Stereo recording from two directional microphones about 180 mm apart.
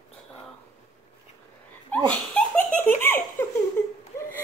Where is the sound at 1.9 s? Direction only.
10° left (ahead or behind).